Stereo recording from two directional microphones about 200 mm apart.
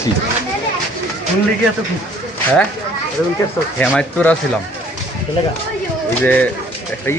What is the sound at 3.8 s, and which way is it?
Speech, 5° left (ahead or behind).